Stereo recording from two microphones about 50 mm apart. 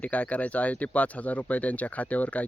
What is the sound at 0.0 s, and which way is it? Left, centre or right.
Speech, left.